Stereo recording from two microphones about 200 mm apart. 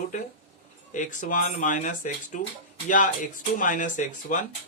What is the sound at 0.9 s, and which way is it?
Speech, 40° left (ahead or behind).